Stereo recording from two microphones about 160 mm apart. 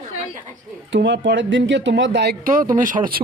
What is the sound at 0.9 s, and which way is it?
Speech, 90° right.